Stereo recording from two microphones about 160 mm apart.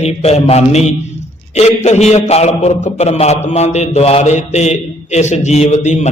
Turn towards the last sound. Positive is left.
turn(degrees=45)  # may be behind; listen again after turning